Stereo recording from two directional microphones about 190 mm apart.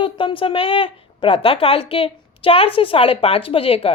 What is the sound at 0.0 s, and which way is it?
A woman's voice, 25° left (ahead or behind).